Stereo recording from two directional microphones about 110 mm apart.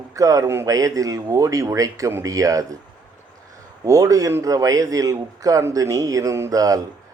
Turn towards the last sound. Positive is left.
turn(degrees=-35)  # may be behind; listen again after turning